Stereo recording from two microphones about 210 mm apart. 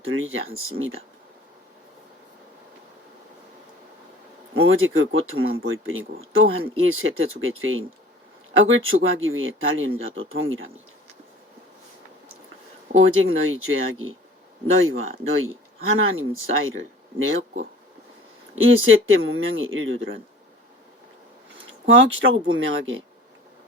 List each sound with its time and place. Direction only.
0.0 s speech: 70° right (ahead or behind)
4.5 s speech: 75° right (ahead or behind)
12.9 s speech: 70° right (ahead or behind)
18.5 s speech: 70° right (ahead or behind)
21.7 s speech: 65° right (ahead or behind)